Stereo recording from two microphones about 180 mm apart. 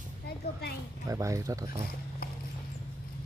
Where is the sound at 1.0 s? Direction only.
15° right (ahead or behind).